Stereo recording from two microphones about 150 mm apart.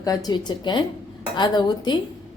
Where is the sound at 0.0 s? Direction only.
25° left (ahead or behind).